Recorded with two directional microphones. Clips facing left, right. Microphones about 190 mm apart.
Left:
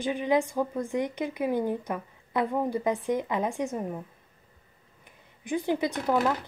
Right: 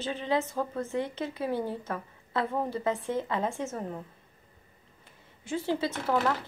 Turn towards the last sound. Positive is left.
turn(degrees=15)  # may be behind; listen again after turning